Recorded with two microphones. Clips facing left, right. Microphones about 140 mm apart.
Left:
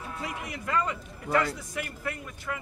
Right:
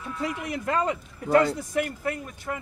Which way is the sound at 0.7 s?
35° right (ahead or behind).